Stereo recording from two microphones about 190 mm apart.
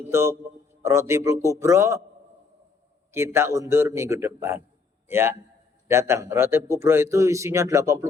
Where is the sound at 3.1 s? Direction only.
15° right (ahead or behind).